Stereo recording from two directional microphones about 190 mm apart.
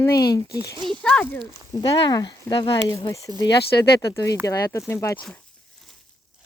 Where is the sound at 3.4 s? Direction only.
60° left (ahead or behind).